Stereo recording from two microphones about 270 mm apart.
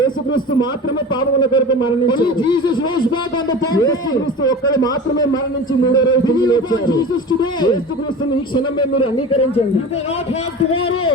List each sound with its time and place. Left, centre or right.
1.2 s a man's voice: centre
9.1 s speech: left